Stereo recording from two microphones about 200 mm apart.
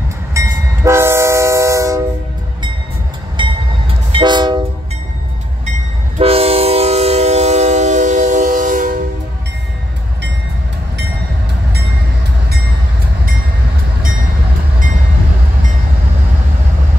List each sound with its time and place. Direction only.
0.3 s train: 15° right (ahead or behind)
3.4 s train: 25° right (ahead or behind)
6.1 s train: 30° right (ahead or behind)